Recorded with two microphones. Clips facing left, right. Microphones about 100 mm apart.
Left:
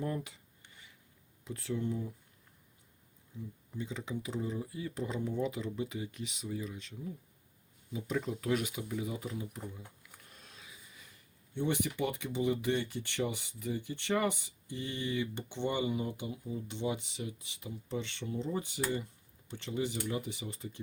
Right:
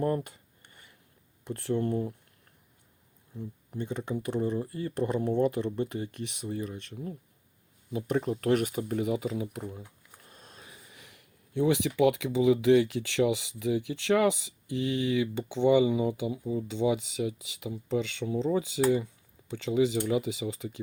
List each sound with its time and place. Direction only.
0.0 s a sound: 50° right (ahead or behind)
1.5 s speech: 60° right (ahead or behind)
3.3 s speech: 60° right (ahead or behind)
9.0 s speech: 85° right
10.2 s speech: 40° right (ahead or behind); by 20.8 s 90° right